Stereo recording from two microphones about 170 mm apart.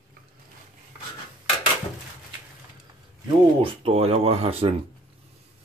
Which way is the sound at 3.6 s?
35° right (ahead or behind).